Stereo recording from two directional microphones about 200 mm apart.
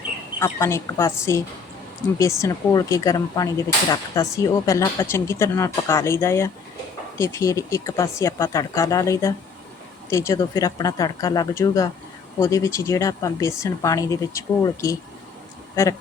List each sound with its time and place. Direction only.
0.3 s speech: 15° left (ahead or behind)